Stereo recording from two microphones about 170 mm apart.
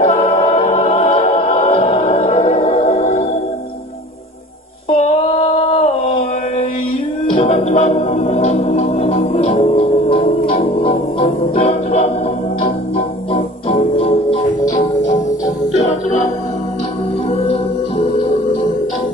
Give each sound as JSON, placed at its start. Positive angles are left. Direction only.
{"t": 0.0, "sound": "a capella", "side_deg": 35}
{"t": 4.8, "sound": "a sound", "side_deg": 35}
{"t": 7.2, "sound": "music", "side_deg": 35}
{"t": 14.6, "sound": "music", "side_deg": 20}
{"t": 17.3, "sound": "music", "side_deg": 40}